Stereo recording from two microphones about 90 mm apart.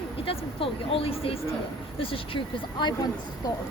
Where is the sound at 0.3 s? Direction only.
90° left; by 2.9 s 70° left (ahead or behind).